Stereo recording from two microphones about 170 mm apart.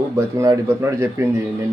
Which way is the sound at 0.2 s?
15° right (ahead or behind).